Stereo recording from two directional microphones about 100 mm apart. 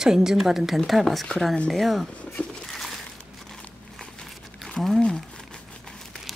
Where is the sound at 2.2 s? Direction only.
15° left (ahead or behind).